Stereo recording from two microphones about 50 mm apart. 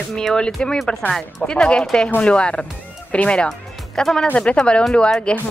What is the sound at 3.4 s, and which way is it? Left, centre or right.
Speech, centre.